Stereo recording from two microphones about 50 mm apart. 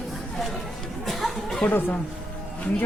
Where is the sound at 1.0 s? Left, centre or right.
Centre.